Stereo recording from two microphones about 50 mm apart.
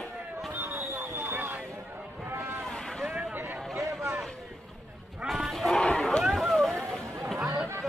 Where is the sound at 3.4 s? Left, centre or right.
Right.